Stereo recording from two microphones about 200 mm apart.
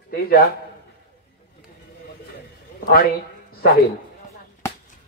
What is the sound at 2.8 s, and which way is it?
Speech, 50° left (ahead or behind).